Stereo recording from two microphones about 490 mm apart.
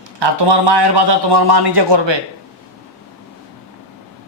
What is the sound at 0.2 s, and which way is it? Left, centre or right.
A man's voice, right.